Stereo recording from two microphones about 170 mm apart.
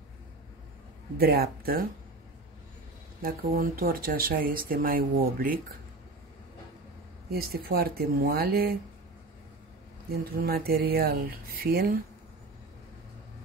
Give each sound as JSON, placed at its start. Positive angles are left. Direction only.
{"t": 1.1, "sound": "speech", "side_deg": -65}
{"t": 3.2, "sound": "speech", "side_deg": -60}
{"t": 7.2, "sound": "speech", "side_deg": -65}
{"t": 10.2, "sound": "speech", "side_deg": -65}